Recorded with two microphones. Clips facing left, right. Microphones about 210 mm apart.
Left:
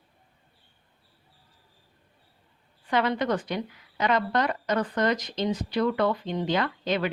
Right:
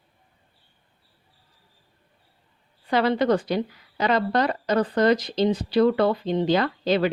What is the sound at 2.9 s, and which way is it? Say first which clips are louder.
A woman's voice: right 5 dB; 35° right (ahead or behind).